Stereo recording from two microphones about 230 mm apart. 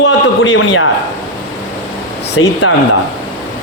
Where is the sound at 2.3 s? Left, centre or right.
Left.